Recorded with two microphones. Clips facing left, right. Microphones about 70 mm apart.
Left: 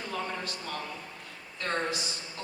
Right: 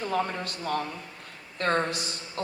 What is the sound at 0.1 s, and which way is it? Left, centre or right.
A woman's voice, right.